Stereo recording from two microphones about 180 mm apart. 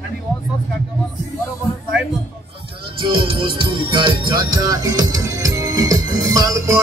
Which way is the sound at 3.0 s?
30° right (ahead or behind).